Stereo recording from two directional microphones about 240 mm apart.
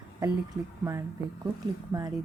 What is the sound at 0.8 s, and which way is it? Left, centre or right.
A woman's voice, centre.